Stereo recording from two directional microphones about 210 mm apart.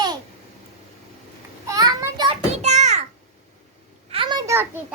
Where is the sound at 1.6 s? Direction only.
15° right (ahead or behind).